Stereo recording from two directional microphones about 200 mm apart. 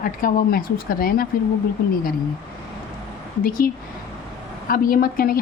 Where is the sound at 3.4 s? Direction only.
45° left (ahead or behind).